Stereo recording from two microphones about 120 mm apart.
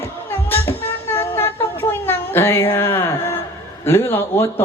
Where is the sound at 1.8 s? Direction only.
20° left (ahead or behind).